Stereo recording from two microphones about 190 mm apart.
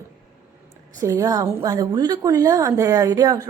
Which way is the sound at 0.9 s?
15° right (ahead or behind).